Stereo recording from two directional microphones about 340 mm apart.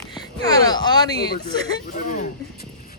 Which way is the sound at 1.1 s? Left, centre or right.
Left.